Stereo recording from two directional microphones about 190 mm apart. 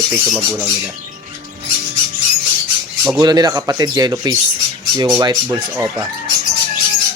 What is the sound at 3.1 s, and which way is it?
Speech, 20° right (ahead or behind).